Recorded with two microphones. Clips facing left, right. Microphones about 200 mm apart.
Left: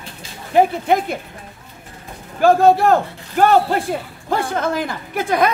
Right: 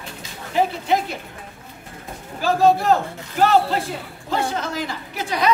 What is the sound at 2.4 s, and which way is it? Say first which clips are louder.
A man's voice: left 5 dB; 55° left (ahead or behind).